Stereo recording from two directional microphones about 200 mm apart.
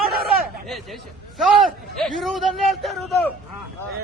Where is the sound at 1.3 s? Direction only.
Centre (ahead or behind).